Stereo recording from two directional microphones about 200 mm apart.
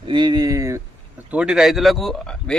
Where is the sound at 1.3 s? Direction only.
5° right (ahead or behind).